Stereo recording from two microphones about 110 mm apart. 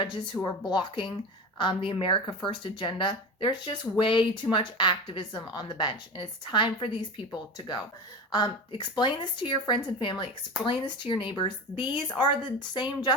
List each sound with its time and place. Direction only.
0.0 s speech: 45° left (ahead or behind)
8.3 s a woman's voice: 45° left (ahead or behind)